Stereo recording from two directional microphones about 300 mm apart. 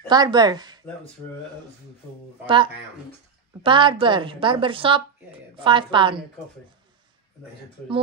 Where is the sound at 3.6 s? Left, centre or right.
Centre.